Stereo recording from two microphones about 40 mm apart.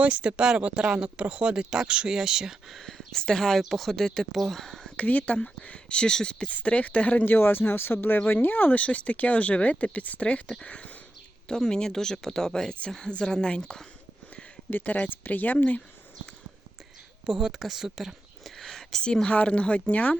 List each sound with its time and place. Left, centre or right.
0.0 s speech: right
2.6 s speech: centre
4.9 s speech: left
5.6 s a woman's voice: left
6.5 s speech: left
7.3 s speech: left
8.7 s a woman's voice: left
11.4 s a woman's voice: centre
14.7 s speech: left
17.3 s speech: centre
18.4 s whispering: centre
19.0 s a woman's voice: left